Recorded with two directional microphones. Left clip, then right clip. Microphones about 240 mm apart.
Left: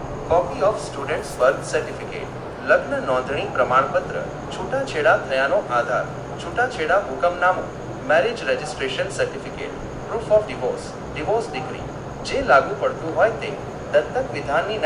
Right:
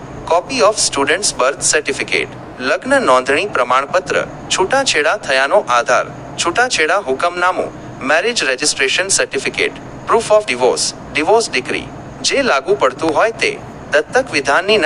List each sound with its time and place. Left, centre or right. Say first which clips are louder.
0.3 s a man's voice: right 6 dB; right